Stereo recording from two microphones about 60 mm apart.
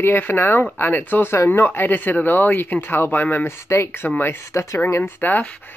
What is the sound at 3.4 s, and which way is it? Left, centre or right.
Speech, left.